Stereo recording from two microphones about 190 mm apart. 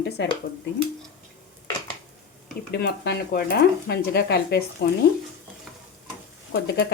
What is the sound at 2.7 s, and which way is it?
Speech, 55° left (ahead or behind).